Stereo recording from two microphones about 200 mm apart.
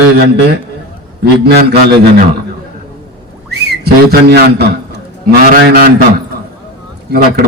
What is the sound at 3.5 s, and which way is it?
A man's voice, 55° right (ahead or behind).